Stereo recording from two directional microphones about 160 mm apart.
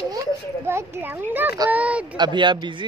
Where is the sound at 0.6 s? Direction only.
15° right (ahead or behind).